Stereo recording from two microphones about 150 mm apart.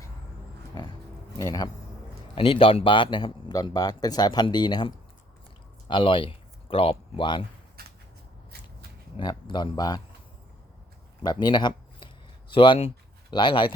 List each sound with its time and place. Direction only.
0.7 s pig: 30° left (ahead or behind)
1.4 s speech: 25° left (ahead or behind)
2.3 s a man's voice: 35° left (ahead or behind)
9.1 s speech: 30° left (ahead or behind)
11.2 s a sound: 30° left (ahead or behind)
13.3 s a man's voice: 35° left (ahead or behind)